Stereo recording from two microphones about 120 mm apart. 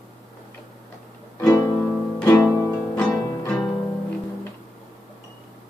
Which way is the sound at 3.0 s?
10° left (ahead or behind).